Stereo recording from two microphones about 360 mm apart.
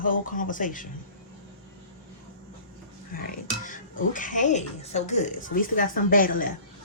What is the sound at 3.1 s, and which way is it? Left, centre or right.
Speech, left.